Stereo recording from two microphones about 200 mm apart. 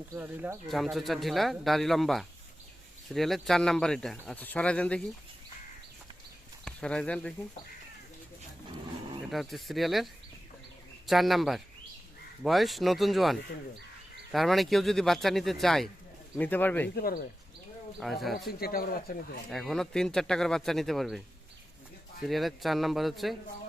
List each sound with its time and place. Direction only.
0.1 s speech: 10° right (ahead or behind); by 5.0 s 5° left (ahead or behind)
6.7 s speech: 5° left (ahead or behind)
9.3 s speech: centre (ahead or behind)
14.3 s speech: centre (ahead or behind)
16.9 s speech: 50° left (ahead or behind)
18.0 s speech: centre (ahead or behind)
18.3 s speech: 50° left (ahead or behind)
19.5 s speech: centre (ahead or behind)
22.3 s speech: centre (ahead or behind)